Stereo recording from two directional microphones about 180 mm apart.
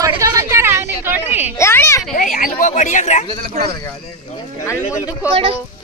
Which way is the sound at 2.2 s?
45° left (ahead or behind).